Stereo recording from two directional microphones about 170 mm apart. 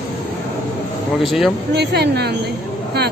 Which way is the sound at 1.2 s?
Centre (ahead or behind).